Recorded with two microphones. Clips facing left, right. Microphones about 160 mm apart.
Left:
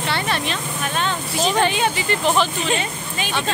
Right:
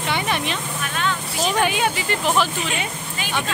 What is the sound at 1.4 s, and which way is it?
Speech, 10° right (ahead or behind).